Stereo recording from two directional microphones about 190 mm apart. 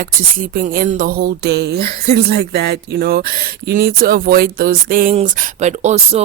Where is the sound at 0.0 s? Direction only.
45° right (ahead or behind).